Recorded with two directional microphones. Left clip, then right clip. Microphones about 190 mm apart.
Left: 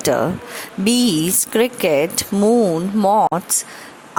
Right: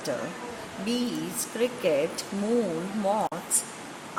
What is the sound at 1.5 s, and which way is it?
Speech, 55° left (ahead or behind).